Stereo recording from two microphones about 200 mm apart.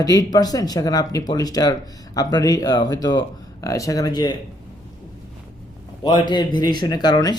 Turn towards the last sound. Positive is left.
turn(degrees=20)  # may be behind; listen again after turning